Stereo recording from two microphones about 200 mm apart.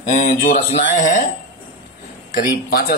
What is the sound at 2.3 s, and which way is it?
Speech, 50° left (ahead or behind).